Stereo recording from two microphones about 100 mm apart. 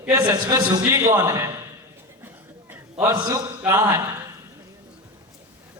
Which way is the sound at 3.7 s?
30° right (ahead or behind).